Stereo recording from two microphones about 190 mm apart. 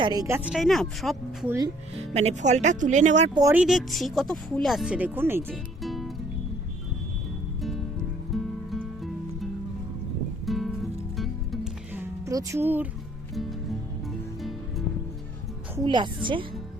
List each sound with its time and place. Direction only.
0.0 s speech: 20° right (ahead or behind); by 1.5 s centre (ahead or behind)
1.5 s speech: 15° right (ahead or behind)
2.1 s speech: 35° right (ahead or behind)
3.5 s speech: 5° right (ahead or behind)
5.8 s music: centre (ahead or behind)
7.6 s music: centre (ahead or behind)
10.4 s music: centre (ahead or behind)
11.9 s music: 15° right (ahead or behind)
13.3 s music: centre (ahead or behind)
15.7 s a woman's voice: 20° right (ahead or behind)